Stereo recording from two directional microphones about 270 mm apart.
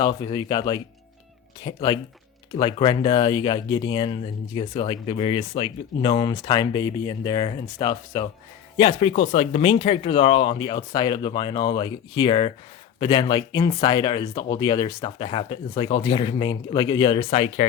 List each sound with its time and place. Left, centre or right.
0.0 s speech: centre